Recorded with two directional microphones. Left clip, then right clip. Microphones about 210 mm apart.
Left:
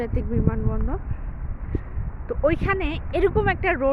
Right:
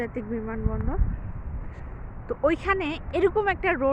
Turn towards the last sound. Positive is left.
turn(degrees=5)  # may be behind; listen again after turning